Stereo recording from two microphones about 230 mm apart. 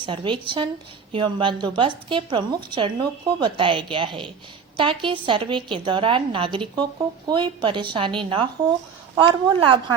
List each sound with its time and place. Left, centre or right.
0.0 s a woman's voice: right